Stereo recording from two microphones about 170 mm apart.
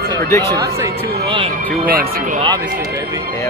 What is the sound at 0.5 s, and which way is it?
Speech, 20° right (ahead or behind).